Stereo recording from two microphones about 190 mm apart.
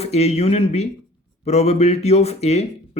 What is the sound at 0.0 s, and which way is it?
Speech, 35° left (ahead or behind).